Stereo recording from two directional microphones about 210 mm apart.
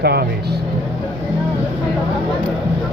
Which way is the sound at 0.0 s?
50° right (ahead or behind).